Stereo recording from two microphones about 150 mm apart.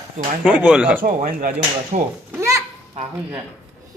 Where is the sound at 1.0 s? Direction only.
70° right (ahead or behind).